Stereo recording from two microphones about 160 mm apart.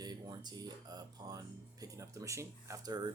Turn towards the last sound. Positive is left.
turn(degrees=-25)  # may be behind; listen again after turning